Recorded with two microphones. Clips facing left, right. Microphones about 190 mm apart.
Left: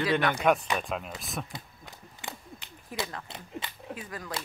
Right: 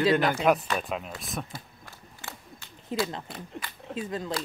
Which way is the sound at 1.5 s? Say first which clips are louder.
Even; 20° left (ahead or behind).